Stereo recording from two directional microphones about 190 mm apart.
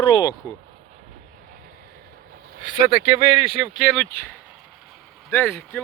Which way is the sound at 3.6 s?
Centre (ahead or behind).